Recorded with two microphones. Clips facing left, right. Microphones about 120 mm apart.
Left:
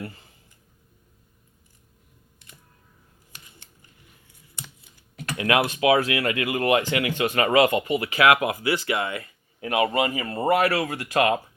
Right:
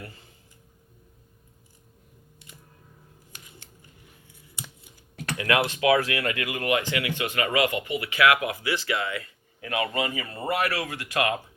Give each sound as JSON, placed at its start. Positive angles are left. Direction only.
{"t": 5.4, "sound": "speech", "side_deg": 25}